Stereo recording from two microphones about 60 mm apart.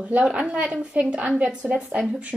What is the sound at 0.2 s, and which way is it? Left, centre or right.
A woman's voice, centre.